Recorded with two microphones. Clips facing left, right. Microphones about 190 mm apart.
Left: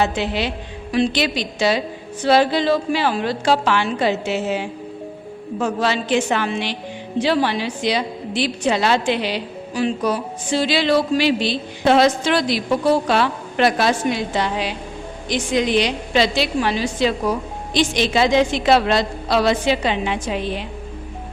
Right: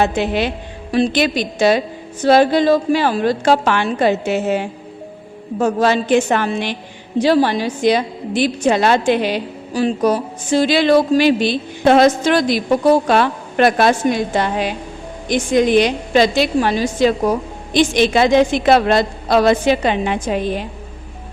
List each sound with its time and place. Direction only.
0.0 s a woman's voice: 50° right (ahead or behind)